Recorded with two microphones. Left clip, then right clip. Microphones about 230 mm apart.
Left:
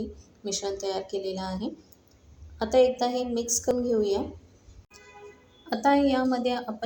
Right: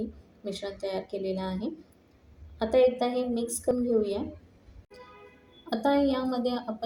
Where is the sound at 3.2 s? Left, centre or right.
Centre.